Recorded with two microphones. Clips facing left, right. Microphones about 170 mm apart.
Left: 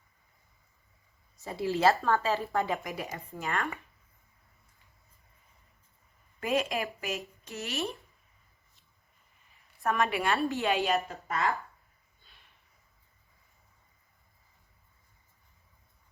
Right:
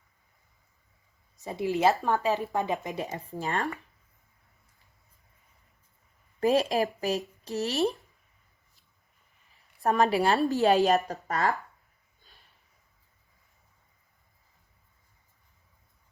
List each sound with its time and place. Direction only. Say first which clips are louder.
1.4 s speech: right 2 dB; 20° right (ahead or behind)
3.2 s a woman's voice: right 3 dB; 35° right (ahead or behind)
6.4 s a woman's voice: right 6 dB; 35° right (ahead or behind)
9.8 s a woman's voice: right 5 dB; 35° right (ahead or behind)